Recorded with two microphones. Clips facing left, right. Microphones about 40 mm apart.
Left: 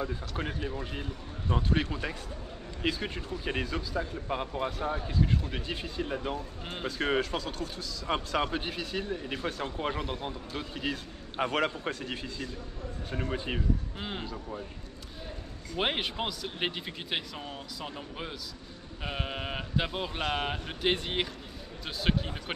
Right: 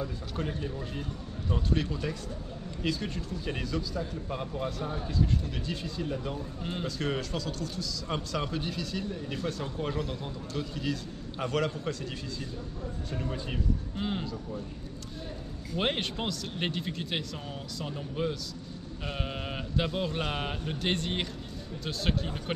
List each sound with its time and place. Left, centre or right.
0.0 s a man's voice: left
13.9 s speech: centre
14.2 s a man's voice: left
15.7 s speech: centre